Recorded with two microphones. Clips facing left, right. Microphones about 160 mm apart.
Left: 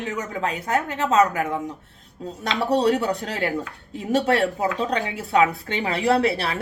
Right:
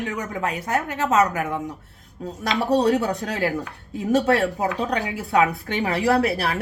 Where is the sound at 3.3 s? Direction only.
25° left (ahead or behind).